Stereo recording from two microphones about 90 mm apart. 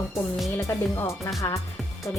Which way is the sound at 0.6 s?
35° left (ahead or behind).